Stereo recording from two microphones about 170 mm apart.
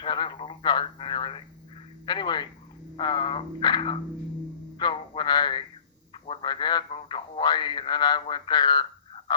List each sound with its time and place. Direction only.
0.0 s radio: 25° left (ahead or behind)
2.0 s telephone: 25° left (ahead or behind)
3.0 s a sound: 25° left (ahead or behind)